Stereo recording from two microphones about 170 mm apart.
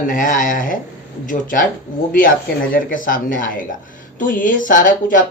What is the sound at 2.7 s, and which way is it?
A man's voice, 50° left (ahead or behind).